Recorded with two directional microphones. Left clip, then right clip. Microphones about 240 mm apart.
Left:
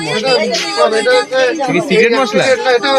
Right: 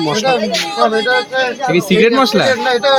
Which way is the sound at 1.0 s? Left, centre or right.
Left.